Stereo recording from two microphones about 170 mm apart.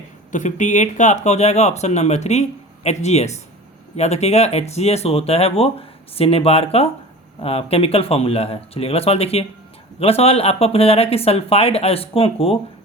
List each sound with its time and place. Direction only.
0.3 s speech: 45° left (ahead or behind)